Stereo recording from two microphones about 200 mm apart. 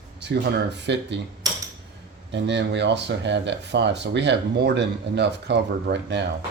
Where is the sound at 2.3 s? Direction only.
60° right (ahead or behind).